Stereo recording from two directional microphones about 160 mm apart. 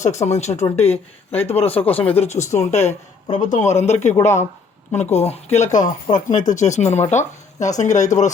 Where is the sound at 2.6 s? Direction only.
45° left (ahead or behind).